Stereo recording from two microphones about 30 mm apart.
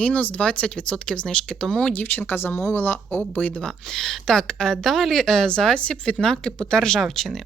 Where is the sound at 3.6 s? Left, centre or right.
Centre.